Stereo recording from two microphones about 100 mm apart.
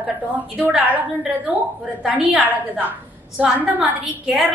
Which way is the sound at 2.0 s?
15° right (ahead or behind).